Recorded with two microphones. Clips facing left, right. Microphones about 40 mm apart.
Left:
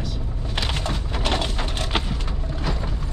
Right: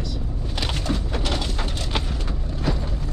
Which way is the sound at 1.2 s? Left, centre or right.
Left.